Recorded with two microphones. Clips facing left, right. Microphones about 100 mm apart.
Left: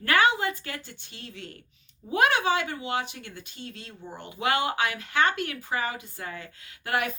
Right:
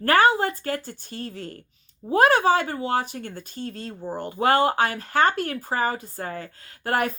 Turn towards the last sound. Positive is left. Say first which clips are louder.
# right 4 dB
turn(degrees=-40)  # may be behind; listen again after turning